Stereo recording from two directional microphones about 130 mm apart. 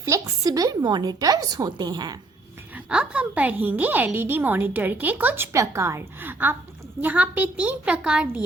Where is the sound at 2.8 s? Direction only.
5° right (ahead or behind).